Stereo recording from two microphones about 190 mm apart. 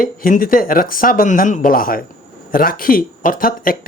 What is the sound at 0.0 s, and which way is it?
Speech, 45° left (ahead or behind).